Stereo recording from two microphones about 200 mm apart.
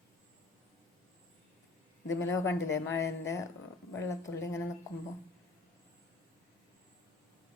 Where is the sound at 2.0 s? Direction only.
15° left (ahead or behind).